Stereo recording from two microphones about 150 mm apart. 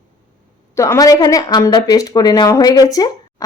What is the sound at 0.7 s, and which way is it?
Speech, 20° left (ahead or behind).